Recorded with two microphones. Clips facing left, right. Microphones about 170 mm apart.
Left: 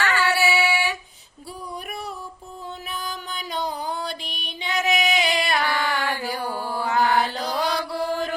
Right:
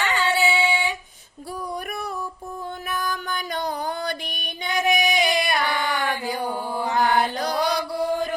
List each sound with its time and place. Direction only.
0.0 s female singing: 20° right (ahead or behind)
1.9 s a sound: 45° right (ahead or behind)
3.0 s music: 50° right (ahead or behind)
4.7 s female singing: 20° right (ahead or behind)
6.1 s mantra: 20° right (ahead or behind)